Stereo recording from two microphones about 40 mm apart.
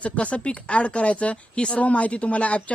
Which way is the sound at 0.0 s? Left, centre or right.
Left.